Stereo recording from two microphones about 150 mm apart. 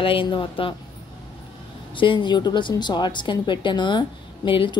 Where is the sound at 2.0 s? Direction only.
30° left (ahead or behind).